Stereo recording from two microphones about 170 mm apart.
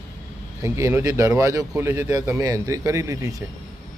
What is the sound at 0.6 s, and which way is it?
A man's voice, 15° right (ahead or behind).